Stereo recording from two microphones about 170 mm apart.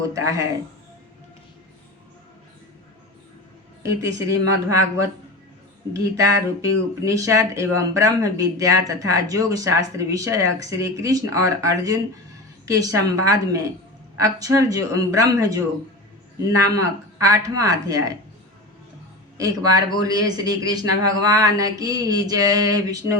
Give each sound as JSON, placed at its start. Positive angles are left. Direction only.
{"t": 0.0, "sound": "speech", "side_deg": -20}
{"t": 3.8, "sound": "a woman's voice", "side_deg": -20}
{"t": 19.4, "sound": "speech", "side_deg": -20}